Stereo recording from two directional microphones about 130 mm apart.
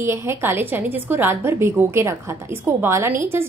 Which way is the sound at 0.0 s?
20° right (ahead or behind).